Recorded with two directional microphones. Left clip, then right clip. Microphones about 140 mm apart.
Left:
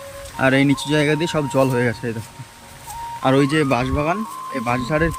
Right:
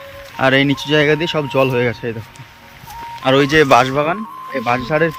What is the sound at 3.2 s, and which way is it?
Speech, 15° left (ahead or behind).